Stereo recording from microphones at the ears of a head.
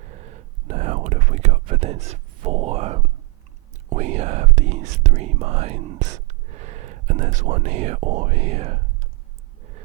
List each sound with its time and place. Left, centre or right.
0.0 s whispering: right
3.8 s speech: right